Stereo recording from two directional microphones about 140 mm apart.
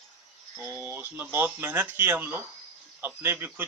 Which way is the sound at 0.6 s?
15° right (ahead or behind).